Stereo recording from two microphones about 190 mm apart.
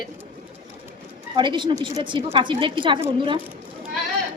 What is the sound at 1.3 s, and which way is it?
A woman's voice, 25° right (ahead or behind).